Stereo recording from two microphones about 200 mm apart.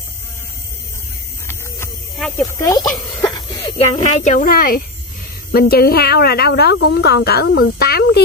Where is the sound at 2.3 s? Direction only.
15° left (ahead or behind).